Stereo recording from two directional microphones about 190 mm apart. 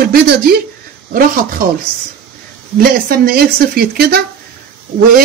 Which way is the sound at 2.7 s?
50° right (ahead or behind).